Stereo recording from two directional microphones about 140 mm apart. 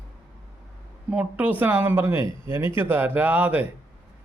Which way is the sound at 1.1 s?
10° right (ahead or behind).